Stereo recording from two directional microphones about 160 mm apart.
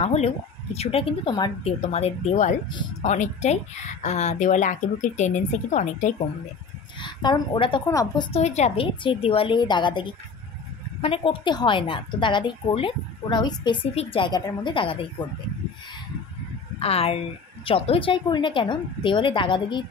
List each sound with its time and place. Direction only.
0.0 s a woman's voice: 40° left (ahead or behind)
1.6 s a woman's voice: 40° left (ahead or behind)
7.0 s a woman's voice: 30° left (ahead or behind)
7.9 s a woman's voice: 20° left (ahead or behind)
8.3 s a woman's voice: 45° left (ahead or behind)
16.8 s a woman's voice: 40° left (ahead or behind)